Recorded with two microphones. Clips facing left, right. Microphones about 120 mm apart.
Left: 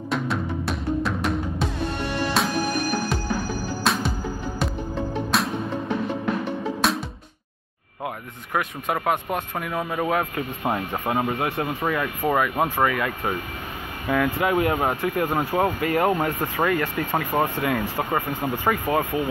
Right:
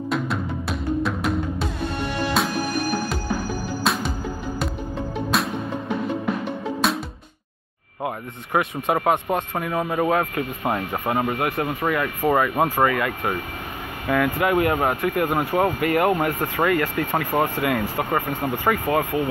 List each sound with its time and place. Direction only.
0.1 s music: centre (ahead or behind)
3.9 s music: centre (ahead or behind)
5.3 s music: centre (ahead or behind)
6.8 s music: centre (ahead or behind)
8.5 s speech: 5° right (ahead or behind)
9.6 s speech: 10° right (ahead or behind)